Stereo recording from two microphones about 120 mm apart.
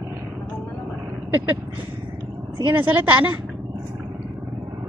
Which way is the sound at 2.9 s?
15° right (ahead or behind).